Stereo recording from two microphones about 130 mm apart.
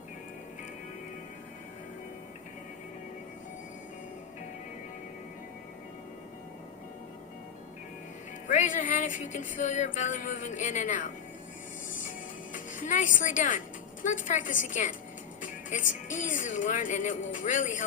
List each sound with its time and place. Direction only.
8.4 s music: 80° left
12.5 s a woman's voice: 90° left